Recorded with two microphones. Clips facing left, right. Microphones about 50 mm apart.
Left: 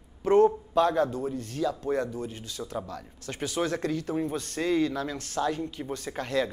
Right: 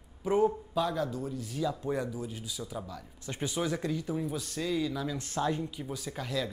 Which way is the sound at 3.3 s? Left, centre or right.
Left.